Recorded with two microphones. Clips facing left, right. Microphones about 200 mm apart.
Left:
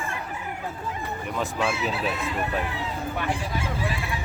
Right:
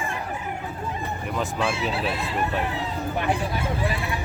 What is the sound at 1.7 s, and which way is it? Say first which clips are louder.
Speech: right 1 dB; 30° right (ahead or behind).